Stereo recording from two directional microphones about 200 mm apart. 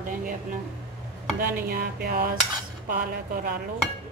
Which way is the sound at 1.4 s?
45° right (ahead or behind).